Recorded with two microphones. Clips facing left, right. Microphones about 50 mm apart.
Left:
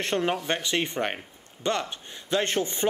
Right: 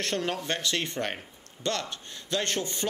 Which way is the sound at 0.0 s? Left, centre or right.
Left.